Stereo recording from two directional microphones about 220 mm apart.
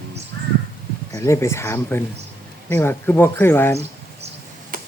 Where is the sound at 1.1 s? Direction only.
15° left (ahead or behind).